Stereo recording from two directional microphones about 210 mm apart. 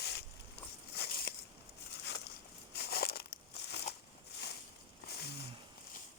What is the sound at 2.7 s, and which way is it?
Crackle, 50° left (ahead or behind).